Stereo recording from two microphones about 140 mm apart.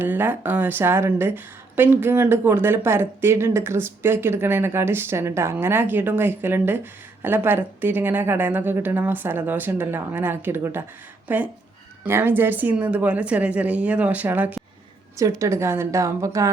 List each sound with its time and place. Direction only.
0.0 s a woman's voice: 15° right (ahead or behind)